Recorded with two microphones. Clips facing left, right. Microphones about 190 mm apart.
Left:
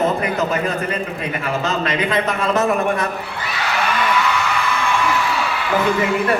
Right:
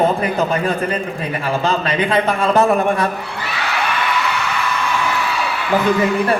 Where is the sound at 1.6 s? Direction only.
30° right (ahead or behind).